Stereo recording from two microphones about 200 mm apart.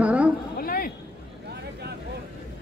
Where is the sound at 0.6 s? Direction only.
45° left (ahead or behind).